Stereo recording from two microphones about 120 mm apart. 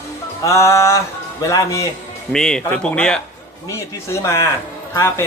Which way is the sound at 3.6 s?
25° left (ahead or behind).